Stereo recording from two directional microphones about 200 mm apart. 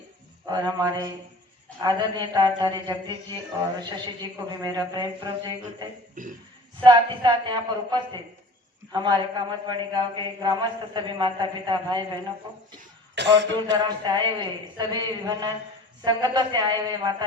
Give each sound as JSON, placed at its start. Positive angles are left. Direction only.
{"t": 0.4, "sound": "a man's voice", "side_deg": -20}
{"t": 6.2, "sound": "speech", "side_deg": -40}
{"t": 6.8, "sound": "a man's voice", "side_deg": -25}
{"t": 13.1, "sound": "speech", "side_deg": -60}
{"t": 13.8, "sound": "a man's voice", "side_deg": -20}